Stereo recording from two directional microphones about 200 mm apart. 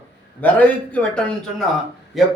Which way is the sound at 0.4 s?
5° left (ahead or behind).